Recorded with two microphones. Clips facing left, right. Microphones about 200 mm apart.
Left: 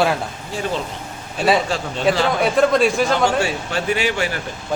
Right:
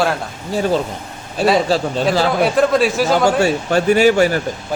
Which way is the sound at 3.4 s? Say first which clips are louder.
Right 7 dB; 40° right (ahead or behind).